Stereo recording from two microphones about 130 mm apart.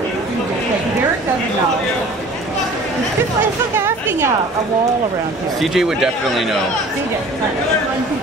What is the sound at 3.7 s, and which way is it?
Speech, 15° right (ahead or behind).